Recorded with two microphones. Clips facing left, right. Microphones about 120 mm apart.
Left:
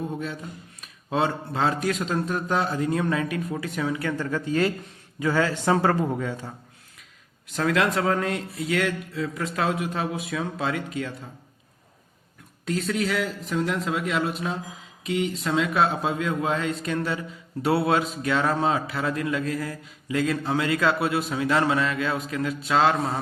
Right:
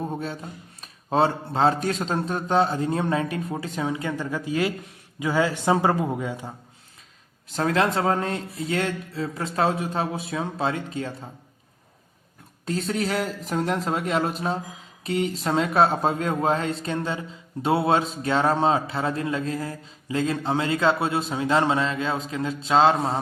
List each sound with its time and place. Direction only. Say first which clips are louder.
0.0 s speech: right 1 dB; 35° right (ahead or behind); by 6.5 s 15° right (ahead or behind)
7.4 s speech: right 1 dB; 30° right (ahead or behind)
12.6 s speech: even; 35° right (ahead or behind)